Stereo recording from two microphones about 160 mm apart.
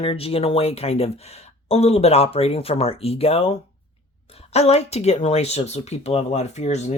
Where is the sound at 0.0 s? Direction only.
35° left (ahead or behind).